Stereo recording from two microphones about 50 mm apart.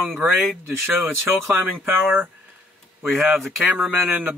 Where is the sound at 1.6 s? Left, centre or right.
Right.